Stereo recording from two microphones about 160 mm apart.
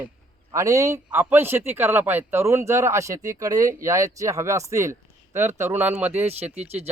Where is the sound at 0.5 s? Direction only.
20° right (ahead or behind).